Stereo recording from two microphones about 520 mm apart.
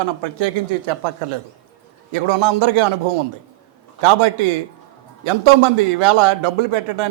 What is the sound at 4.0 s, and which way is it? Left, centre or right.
A man's voice, right.